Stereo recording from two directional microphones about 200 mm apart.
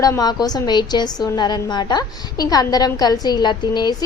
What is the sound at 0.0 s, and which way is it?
A woman's voice, 20° left (ahead or behind).